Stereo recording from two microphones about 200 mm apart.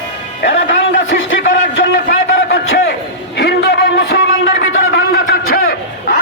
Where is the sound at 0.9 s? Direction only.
50° left (ahead or behind).